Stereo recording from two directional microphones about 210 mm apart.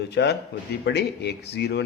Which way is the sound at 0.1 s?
55° left (ahead or behind).